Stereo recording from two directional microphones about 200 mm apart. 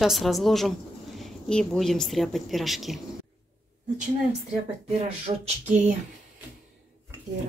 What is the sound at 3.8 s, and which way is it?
Speech, 40° right (ahead or behind).